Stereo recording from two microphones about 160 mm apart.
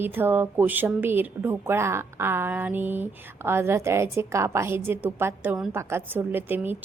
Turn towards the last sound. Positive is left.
turn(degrees=-10)  # may be behind; listen again after turning